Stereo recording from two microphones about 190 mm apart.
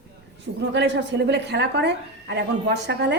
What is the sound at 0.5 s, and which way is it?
A woman's voice, 65° right (ahead or behind).